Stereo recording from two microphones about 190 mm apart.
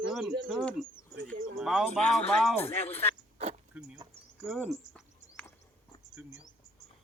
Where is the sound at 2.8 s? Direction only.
30° left (ahead or behind).